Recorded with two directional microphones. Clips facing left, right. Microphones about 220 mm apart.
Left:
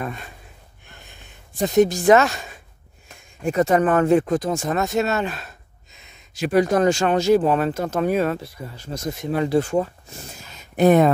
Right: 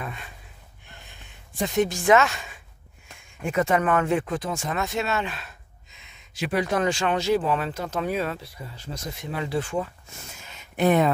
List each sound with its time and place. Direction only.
0.0 s speech: 45° left (ahead or behind)
1.6 s speech: 40° left (ahead or behind)